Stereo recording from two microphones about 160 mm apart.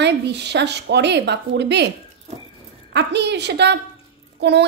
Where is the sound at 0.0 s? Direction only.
90° right.